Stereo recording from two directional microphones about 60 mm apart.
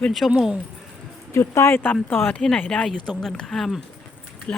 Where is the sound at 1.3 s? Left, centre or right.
Left.